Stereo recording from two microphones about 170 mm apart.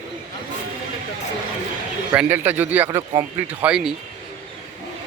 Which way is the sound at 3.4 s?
5° right (ahead or behind).